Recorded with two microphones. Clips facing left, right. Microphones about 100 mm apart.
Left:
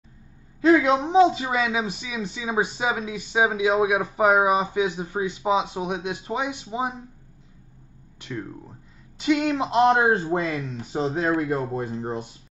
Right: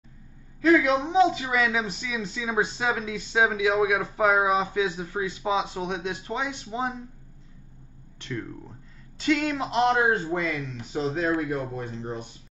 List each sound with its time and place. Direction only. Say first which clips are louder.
0.6 s a woman's voice: left 2 dB; 30° left (ahead or behind)
1.6 s a man's voice: left 1 dB; 10° left (ahead or behind)
8.2 s a man's voice: left 1 dB; 15° left (ahead or behind)
9.7 s speech: left 4 dB; 30° left (ahead or behind)